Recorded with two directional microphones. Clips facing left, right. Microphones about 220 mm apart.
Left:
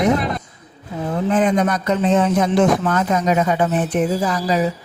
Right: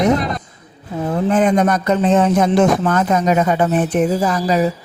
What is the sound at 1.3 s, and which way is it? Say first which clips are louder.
A man's voice: right 2 dB; 45° right (ahead or behind).